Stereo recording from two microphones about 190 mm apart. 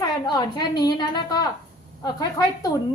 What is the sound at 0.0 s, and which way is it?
A woman's voice, 20° left (ahead or behind).